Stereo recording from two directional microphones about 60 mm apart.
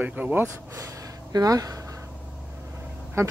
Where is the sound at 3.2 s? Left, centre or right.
Right.